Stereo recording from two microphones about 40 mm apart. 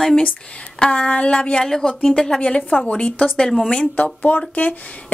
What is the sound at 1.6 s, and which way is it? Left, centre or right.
Speech, centre.